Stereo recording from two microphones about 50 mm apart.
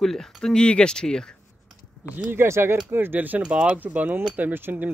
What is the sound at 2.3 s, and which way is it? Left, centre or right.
Speech, right.